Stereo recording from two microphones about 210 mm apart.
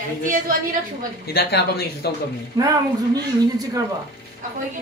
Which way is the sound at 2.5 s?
15° right (ahead or behind).